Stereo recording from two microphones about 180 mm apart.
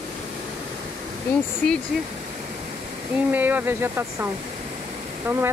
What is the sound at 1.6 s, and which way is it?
Speech, 5° left (ahead or behind).